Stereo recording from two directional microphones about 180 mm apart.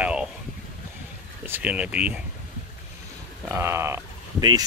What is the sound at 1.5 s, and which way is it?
Speech, 5° right (ahead or behind).